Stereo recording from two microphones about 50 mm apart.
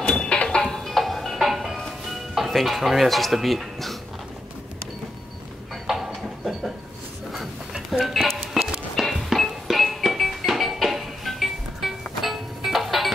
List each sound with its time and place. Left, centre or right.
0.1 s music: centre
0.7 s music: centre
2.3 s speech: centre
5.9 s a sound: centre
8.0 s music: centre